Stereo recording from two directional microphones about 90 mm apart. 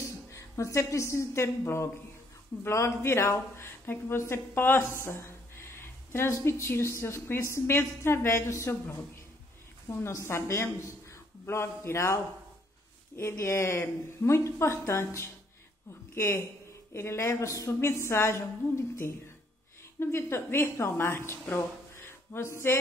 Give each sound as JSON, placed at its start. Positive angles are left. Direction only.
{"t": 0.3, "sound": "a woman's voice", "side_deg": 35}
{"t": 20.0, "sound": "a woman's voice", "side_deg": 30}